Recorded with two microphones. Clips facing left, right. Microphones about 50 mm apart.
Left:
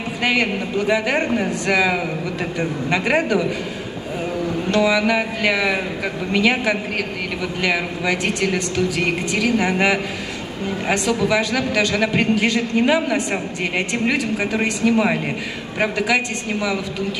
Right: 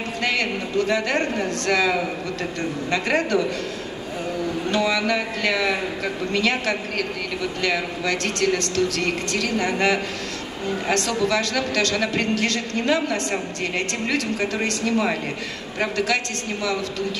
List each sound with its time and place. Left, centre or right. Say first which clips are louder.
0.2 s a man's voice: left 4 dB; centre
4.7 s a man's voice: left 5 dB; centre